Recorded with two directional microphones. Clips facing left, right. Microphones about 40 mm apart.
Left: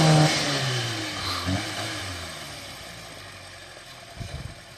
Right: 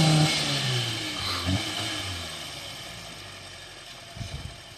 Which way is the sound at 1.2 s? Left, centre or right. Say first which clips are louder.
Left 1 dB; centre.